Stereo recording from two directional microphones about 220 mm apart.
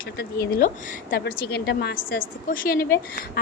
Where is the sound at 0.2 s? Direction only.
45° left (ahead or behind).